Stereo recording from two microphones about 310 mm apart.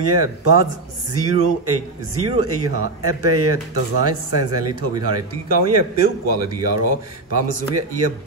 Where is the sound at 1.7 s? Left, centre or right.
Right.